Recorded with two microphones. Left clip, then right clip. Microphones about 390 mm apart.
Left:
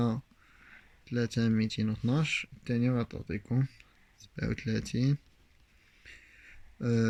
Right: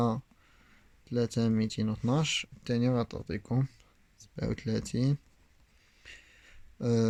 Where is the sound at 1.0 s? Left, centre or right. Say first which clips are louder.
Right 2 dB; right.